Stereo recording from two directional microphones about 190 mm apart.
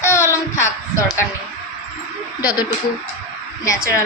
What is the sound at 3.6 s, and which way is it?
Speech, 15° left (ahead or behind).